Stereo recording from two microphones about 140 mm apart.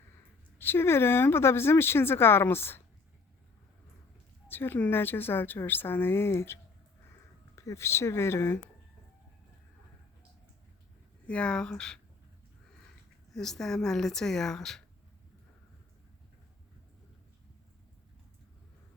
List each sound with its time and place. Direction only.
0.6 s speech: 15° left (ahead or behind)
4.4 s speech: 15° left (ahead or behind)
11.3 s speech: 10° left (ahead or behind)
13.3 s speech: 5° left (ahead or behind)